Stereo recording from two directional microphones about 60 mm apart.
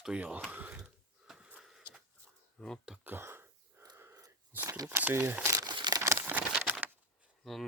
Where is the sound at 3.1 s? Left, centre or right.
Right.